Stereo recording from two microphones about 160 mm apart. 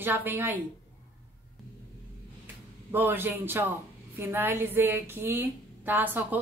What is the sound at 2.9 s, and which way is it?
A woman's voice, 15° right (ahead or behind).